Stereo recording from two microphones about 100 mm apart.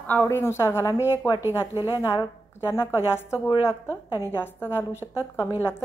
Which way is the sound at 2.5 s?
25° left (ahead or behind).